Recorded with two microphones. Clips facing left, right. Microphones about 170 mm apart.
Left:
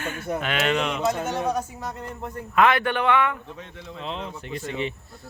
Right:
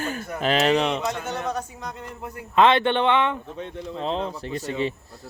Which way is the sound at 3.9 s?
35° right (ahead or behind).